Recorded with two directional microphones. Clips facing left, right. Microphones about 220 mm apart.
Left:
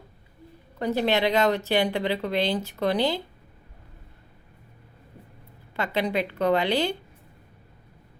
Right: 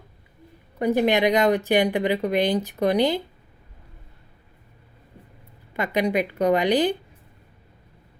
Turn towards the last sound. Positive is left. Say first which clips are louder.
# right 3 dB
turn(degrees=-15)  # may be behind; listen again after turning